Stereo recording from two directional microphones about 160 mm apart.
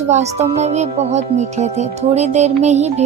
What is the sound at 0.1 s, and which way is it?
Music, 45° right (ahead or behind).